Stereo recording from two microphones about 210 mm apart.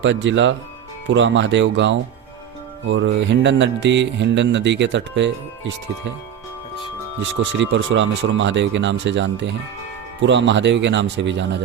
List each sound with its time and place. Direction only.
0.0 s speech: 60° right (ahead or behind)
7.2 s speech: 60° right (ahead or behind)